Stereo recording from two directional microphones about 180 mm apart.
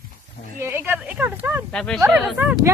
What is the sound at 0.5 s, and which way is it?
A woman's voice, 10° right (ahead or behind).